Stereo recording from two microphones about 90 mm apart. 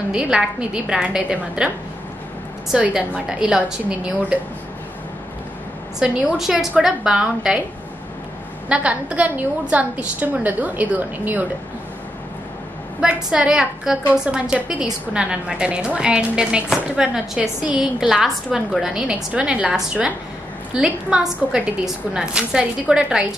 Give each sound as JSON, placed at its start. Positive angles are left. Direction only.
{"t": 0.1, "sound": "a woman's voice", "side_deg": -10}
{"t": 2.7, "sound": "a woman's voice", "side_deg": -10}
{"t": 5.9, "sound": "a woman's voice", "side_deg": -10}
{"t": 8.6, "sound": "a woman's voice", "side_deg": -10}
{"t": 13.0, "sound": "a woman's voice", "side_deg": -10}